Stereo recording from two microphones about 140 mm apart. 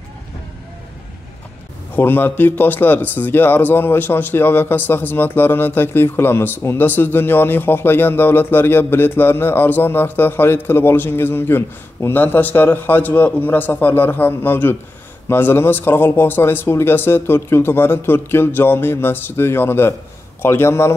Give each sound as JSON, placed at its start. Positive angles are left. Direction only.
{"t": 2.0, "sound": "speech", "side_deg": 15}